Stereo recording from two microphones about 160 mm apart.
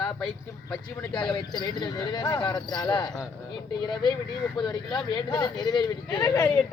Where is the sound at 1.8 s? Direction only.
25° left (ahead or behind).